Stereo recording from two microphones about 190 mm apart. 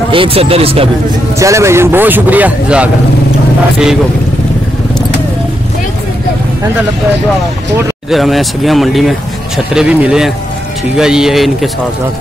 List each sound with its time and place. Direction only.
0.1 s speech: 30° right (ahead or behind)
1.4 s a man's voice: 15° right (ahead or behind)
8.1 s speech: centre (ahead or behind)